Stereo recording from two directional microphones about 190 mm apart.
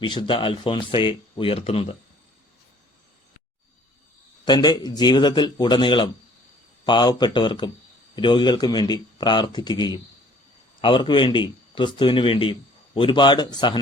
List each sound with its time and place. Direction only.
0.0 s speech: 25° left (ahead or behind)
4.4 s a man's voice: 20° left (ahead or behind)